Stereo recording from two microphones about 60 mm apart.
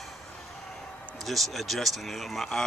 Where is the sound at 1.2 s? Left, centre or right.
Centre.